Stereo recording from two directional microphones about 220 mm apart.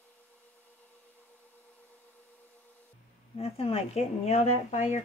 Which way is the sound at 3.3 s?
25° left (ahead or behind).